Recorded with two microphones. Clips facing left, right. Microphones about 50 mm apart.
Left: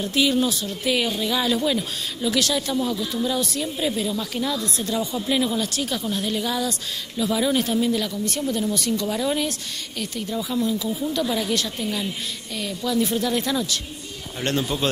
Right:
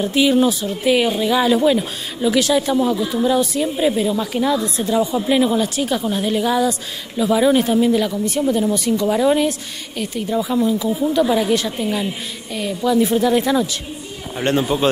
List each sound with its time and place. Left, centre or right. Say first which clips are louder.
0.0 s speech: right 6 dB; centre